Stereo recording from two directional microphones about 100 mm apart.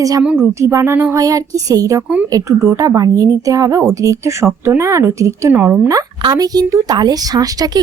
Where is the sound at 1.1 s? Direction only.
35° right (ahead or behind).